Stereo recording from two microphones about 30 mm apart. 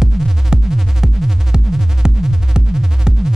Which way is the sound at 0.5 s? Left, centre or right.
Right.